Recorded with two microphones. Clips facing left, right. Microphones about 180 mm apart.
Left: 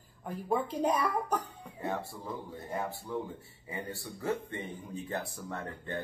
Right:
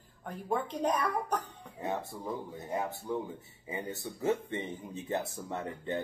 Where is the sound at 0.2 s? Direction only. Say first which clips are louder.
Left 2 dB; 5° left (ahead or behind).